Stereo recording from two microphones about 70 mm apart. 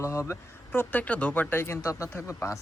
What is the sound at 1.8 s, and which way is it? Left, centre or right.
Speech, left.